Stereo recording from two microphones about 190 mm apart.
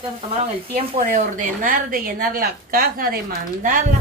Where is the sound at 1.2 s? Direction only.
45° right (ahead or behind).